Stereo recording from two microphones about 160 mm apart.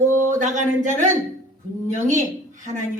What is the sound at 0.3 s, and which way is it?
Speech, 50° right (ahead or behind).